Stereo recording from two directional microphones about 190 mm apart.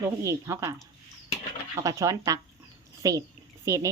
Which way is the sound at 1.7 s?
15° right (ahead or behind).